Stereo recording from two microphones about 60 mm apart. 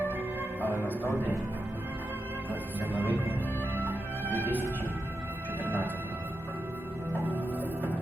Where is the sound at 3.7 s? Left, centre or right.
Right.